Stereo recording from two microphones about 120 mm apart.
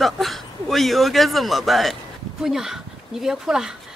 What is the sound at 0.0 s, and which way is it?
A man's voice, centre (ahead or behind).